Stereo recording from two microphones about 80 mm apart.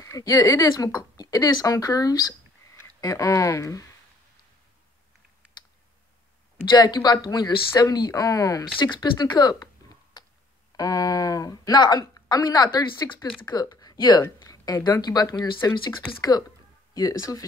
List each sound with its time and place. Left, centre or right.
0.0 s speech: left
6.7 s a woman's voice: left
8.7 s a woman's voice: left
13.9 s speech: left
14.5 s a sound: left
14.9 s a woman's voice: left
15.7 s speech: left
16.2 s a woman's voice: left